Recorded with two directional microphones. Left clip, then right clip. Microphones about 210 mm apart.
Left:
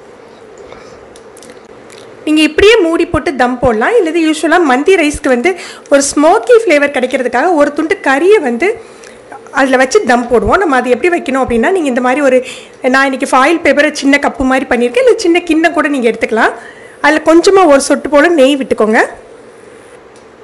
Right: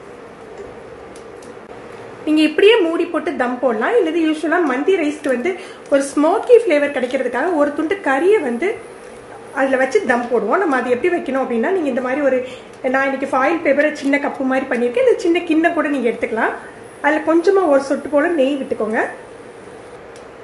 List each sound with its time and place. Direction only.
2.2 s a woman's voice: 35° left (ahead or behind)
17.0 s a woman's voice: 50° left (ahead or behind)